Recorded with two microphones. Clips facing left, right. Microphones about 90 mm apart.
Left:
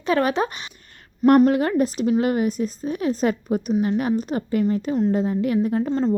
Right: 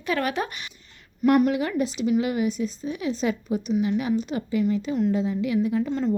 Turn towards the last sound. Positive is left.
turn(degrees=35)  # may be behind; listen again after turning